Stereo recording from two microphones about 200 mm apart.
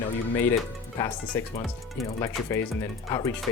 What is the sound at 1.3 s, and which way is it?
Speech, 10° left (ahead or behind).